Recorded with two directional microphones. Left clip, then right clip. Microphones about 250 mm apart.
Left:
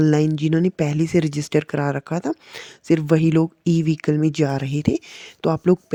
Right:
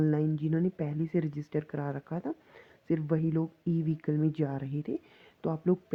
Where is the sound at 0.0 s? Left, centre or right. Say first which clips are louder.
Left 11 dB; left.